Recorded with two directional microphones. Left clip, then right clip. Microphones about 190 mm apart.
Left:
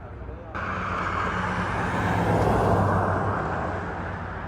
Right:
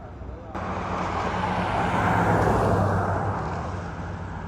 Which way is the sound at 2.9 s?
35° left (ahead or behind).